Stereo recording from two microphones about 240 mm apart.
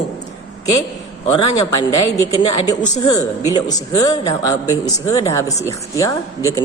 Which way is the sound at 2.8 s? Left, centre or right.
Centre.